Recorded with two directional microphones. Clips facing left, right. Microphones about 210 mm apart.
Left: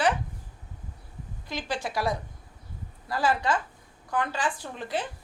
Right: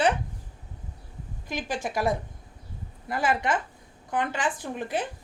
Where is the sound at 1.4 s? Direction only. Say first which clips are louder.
Right 1 dB; 15° right (ahead or behind).